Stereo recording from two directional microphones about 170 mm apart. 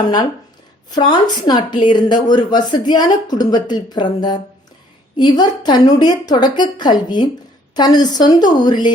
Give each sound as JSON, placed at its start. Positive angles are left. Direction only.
{"t": 0.9, "sound": "a woman's voice", "side_deg": 25}